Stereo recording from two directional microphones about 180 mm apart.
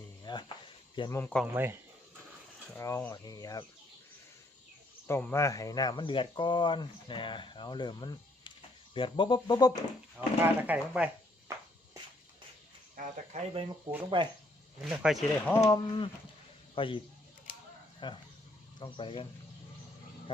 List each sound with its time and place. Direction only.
0.3 s speech: 25° left (ahead or behind)
1.2 s speech: 5° left (ahead or behind)
1.5 s speech: 15° right (ahead or behind)
2.7 s speech: 15° left (ahead or behind)
5.0 s speech: 15° left (ahead or behind)
10.2 s speech: 10° right (ahead or behind)
13.0 s speech: 40° right (ahead or behind)
14.8 s speech: 5° right (ahead or behind)
15.4 s a man's voice: 15° left (ahead or behind)
18.0 s speech: 25° left (ahead or behind)